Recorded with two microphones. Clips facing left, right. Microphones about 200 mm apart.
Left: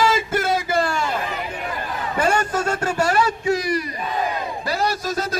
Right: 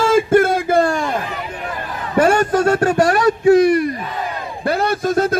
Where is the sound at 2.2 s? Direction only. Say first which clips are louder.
Right 8 dB; 60° right (ahead or behind).